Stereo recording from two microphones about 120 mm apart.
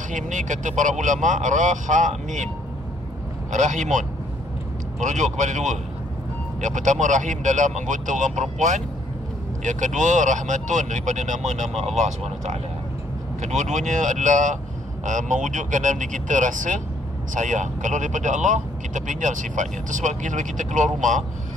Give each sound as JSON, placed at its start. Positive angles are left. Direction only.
{"t": 0.1, "sound": "speech", "side_deg": -90}
{"t": 3.5, "sound": "speech", "side_deg": -90}
{"t": 5.0, "sound": "speech", "side_deg": -85}